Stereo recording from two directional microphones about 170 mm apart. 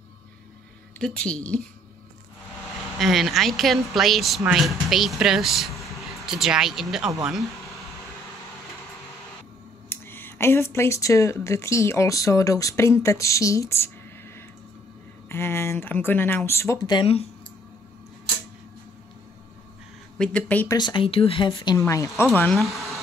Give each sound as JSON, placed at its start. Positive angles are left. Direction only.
{"t": 0.9, "sound": "speech", "side_deg": 5}
{"t": 3.0, "sound": "speech", "side_deg": 0}
{"t": 9.8, "sound": "speech", "side_deg": 10}
{"t": 15.2, "sound": "speech", "side_deg": 15}
{"t": 20.2, "sound": "speech", "side_deg": 5}
{"t": 20.6, "sound": "speech", "side_deg": 25}
{"t": 21.7, "sound": "speech", "side_deg": 20}
{"t": 22.4, "sound": "speech", "side_deg": 0}